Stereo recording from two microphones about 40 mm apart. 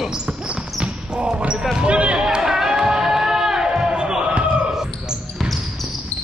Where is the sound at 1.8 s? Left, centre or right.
Right.